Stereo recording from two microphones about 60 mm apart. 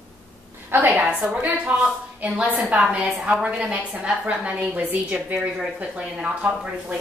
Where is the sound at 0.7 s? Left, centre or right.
Right.